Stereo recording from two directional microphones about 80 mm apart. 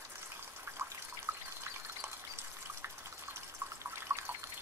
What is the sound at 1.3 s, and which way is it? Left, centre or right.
Water tap, right.